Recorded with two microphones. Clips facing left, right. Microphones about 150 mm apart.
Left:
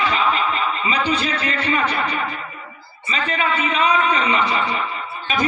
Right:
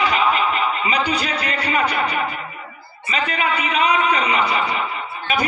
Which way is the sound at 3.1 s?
30° left (ahead or behind).